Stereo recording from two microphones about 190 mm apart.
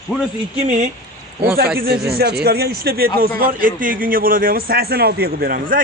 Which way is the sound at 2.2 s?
55° right (ahead or behind).